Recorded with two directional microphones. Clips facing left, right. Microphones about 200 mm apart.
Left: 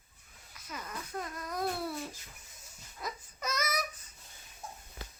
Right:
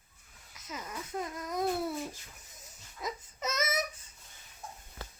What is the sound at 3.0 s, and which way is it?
Baby cry, 25° right (ahead or behind).